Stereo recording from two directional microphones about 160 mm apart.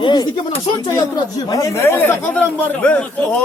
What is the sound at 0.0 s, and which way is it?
Speech, 25° left (ahead or behind).